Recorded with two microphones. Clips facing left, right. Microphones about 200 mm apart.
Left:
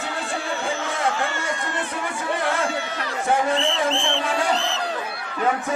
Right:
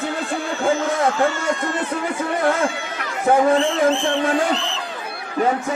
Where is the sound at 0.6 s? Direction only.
50° right (ahead or behind).